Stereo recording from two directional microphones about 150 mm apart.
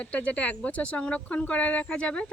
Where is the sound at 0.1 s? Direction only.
10° left (ahead or behind).